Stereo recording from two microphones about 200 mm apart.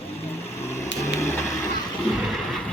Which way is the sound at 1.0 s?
15° left (ahead or behind).